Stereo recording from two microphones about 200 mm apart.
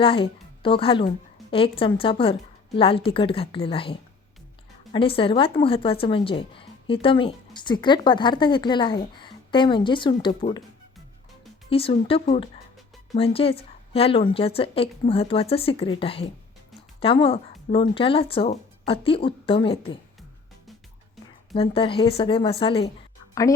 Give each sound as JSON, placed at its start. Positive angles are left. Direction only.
{"t": 0.0, "sound": "a woman's voice", "side_deg": 25}
{"t": 11.7, "sound": "a woman's voice", "side_deg": 25}
{"t": 21.5, "sound": "a woman's voice", "side_deg": 25}